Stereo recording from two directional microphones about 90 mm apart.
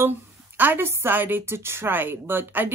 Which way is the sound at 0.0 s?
25° right (ahead or behind).